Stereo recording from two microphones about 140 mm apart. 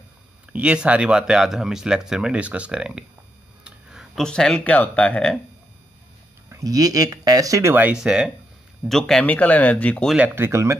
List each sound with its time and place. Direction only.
0.5 s speech: 10° right (ahead or behind); by 5.4 s 5° left (ahead or behind)
6.5 s speech: 25° right (ahead or behind); by 10.1 s 10° left (ahead or behind)
10.1 s speech: 15° right (ahead or behind)